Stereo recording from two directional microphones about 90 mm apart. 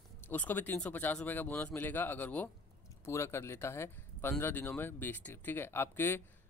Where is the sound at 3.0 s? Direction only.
30° left (ahead or behind).